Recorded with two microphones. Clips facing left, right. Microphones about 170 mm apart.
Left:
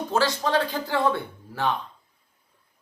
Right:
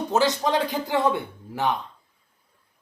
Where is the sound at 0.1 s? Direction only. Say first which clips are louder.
Right 1 dB; 20° right (ahead or behind).